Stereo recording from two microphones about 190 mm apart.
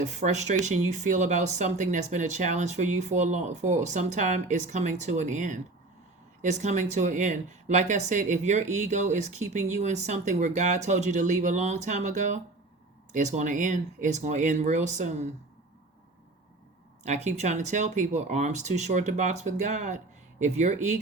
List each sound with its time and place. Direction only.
0.0 s speech: 35° right (ahead or behind)
17.1 s speech: 35° right (ahead or behind)